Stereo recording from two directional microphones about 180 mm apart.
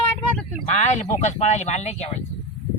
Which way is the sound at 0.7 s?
40° left (ahead or behind).